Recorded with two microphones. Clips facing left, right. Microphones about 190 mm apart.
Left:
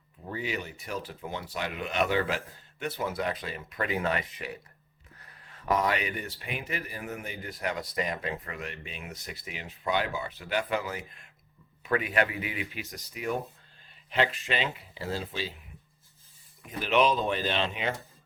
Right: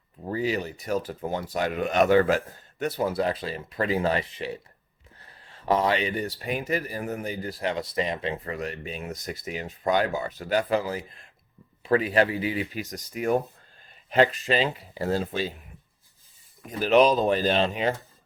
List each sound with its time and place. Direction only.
0.3 s speech: 35° right (ahead or behind)
16.6 s speech: 40° right (ahead or behind)